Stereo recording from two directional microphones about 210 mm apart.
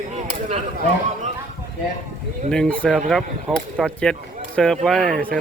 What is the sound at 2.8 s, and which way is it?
Speech, 5° left (ahead or behind).